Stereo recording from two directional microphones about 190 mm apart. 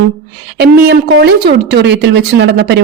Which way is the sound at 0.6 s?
60° right (ahead or behind).